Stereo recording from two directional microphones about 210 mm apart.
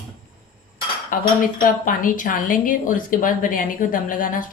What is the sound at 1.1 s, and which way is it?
Speech, 40° left (ahead or behind).